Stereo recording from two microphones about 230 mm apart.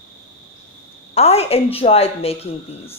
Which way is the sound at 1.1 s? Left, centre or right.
Left.